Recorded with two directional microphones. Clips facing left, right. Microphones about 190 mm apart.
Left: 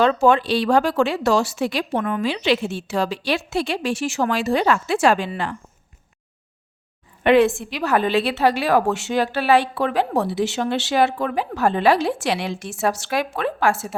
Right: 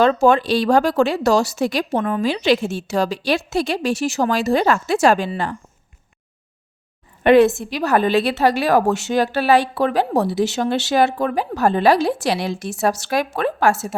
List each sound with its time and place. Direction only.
0.0 s a woman's voice: 40° right (ahead or behind)
7.3 s a woman's voice: 40° right (ahead or behind)